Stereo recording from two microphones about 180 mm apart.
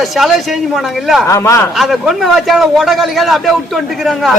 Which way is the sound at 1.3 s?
15° left (ahead or behind).